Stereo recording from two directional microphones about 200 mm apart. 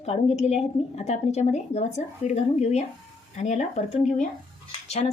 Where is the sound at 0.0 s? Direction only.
35° left (ahead or behind).